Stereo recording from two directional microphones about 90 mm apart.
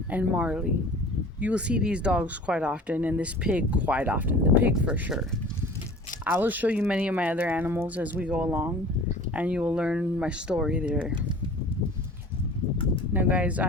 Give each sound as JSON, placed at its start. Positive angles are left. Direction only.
{"t": 0.1, "sound": "speech", "side_deg": -15}
{"t": 6.2, "sound": "speech", "side_deg": -20}
{"t": 13.1, "sound": "speech", "side_deg": -20}